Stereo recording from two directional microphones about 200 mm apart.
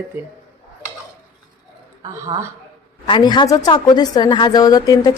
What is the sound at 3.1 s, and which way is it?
A woman's voice, 20° left (ahead or behind).